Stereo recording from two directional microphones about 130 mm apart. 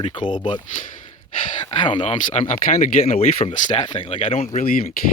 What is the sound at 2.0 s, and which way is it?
Speech, 60° left (ahead or behind).